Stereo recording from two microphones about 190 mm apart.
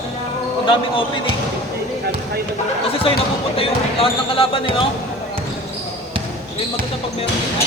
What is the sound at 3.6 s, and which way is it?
Speech, 30° left (ahead or behind).